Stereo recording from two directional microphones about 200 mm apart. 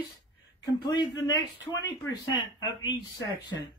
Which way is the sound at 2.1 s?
20° left (ahead or behind).